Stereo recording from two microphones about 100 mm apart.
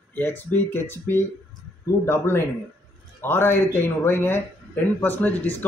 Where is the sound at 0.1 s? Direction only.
20° left (ahead or behind).